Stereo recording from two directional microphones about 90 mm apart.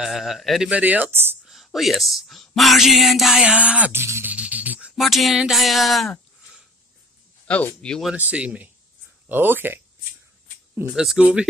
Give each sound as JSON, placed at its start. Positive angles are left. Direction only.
{"t": 0.0, "sound": "speech", "side_deg": 0}
{"t": 0.7, "sound": "speech", "side_deg": -15}
{"t": 1.4, "sound": "speech", "side_deg": 0}
{"t": 3.5, "sound": "speech", "side_deg": -15}
{"t": 4.0, "sound": "speech", "side_deg": -30}
{"t": 4.3, "sound": "a sound", "side_deg": -15}
{"t": 7.4, "sound": "speech", "side_deg": 15}
{"t": 8.2, "sound": "speech", "side_deg": -15}
{"t": 11.0, "sound": "speech", "side_deg": -10}